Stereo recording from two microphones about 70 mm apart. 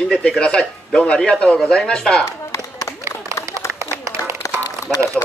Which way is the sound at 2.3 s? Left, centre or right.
Left.